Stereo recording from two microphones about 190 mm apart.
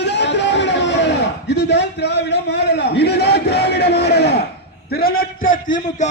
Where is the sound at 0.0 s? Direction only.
65° left (ahead or behind).